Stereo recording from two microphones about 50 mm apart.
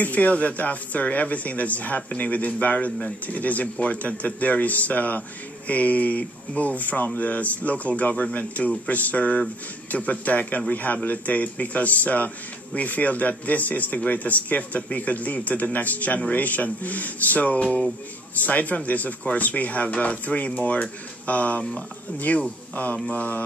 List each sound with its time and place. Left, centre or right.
0.0 s speech: left